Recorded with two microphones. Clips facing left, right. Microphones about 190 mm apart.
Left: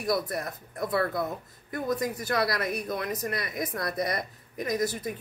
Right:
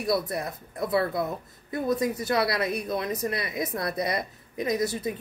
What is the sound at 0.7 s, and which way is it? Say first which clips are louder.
Speech: right 2 dB; 25° right (ahead or behind).